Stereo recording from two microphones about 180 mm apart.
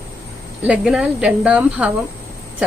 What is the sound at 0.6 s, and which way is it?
A woman's voice, 5° right (ahead or behind).